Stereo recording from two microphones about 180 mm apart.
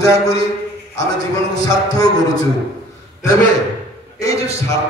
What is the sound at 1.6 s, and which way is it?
Speech, 20° left (ahead or behind).